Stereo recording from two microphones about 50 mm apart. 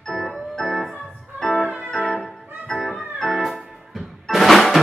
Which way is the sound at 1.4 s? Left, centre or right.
Centre.